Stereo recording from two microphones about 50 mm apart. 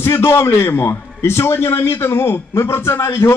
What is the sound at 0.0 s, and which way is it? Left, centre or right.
A man's voice, left.